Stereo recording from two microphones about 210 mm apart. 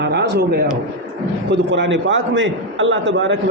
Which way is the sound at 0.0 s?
55° right (ahead or behind).